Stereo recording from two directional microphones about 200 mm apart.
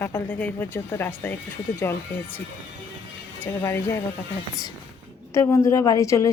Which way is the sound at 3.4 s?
15° left (ahead or behind).